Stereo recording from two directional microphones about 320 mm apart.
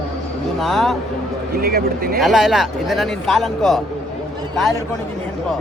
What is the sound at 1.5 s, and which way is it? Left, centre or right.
Speech, right.